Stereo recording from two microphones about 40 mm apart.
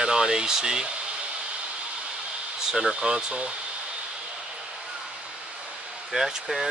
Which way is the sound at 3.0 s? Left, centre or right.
Right.